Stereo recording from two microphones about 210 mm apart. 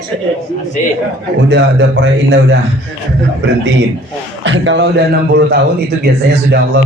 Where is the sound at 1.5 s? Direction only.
55° right (ahead or behind).